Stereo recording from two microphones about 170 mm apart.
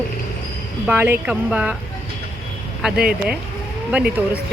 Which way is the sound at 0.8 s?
10° right (ahead or behind).